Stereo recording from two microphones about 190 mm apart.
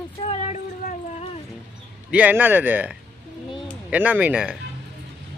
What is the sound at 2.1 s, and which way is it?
Speech, 10° right (ahead or behind).